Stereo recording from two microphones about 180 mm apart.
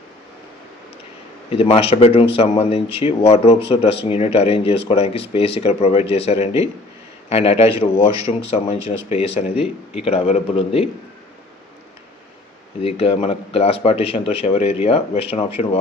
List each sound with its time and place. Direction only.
1.5 s speech: 30° left (ahead or behind)
12.8 s speech: 30° left (ahead or behind)